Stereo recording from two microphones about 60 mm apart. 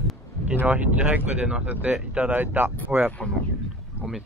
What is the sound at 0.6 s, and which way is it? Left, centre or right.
Speech, right.